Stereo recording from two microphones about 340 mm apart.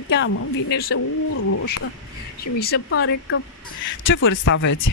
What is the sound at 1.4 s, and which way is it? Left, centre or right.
Speech, left.